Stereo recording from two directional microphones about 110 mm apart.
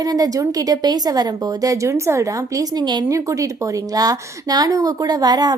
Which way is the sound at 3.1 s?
30° right (ahead or behind).